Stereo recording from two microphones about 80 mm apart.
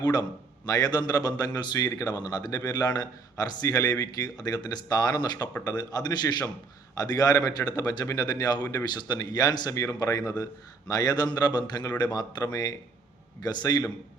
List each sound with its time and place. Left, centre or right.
0.0 s a man's voice: left